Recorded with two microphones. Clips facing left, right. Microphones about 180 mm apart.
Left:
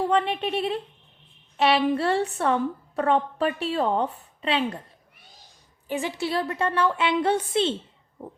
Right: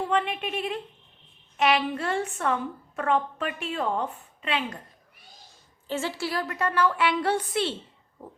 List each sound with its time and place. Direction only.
0.1 s a woman's voice: 35° left (ahead or behind)
5.9 s a woman's voice: 15° left (ahead or behind)